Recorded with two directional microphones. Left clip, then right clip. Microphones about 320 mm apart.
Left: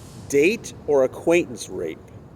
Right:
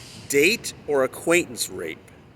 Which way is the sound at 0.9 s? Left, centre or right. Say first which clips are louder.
Left 3 dB; right.